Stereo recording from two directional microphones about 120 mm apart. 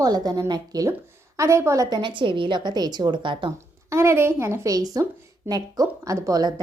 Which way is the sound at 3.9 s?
20° right (ahead or behind).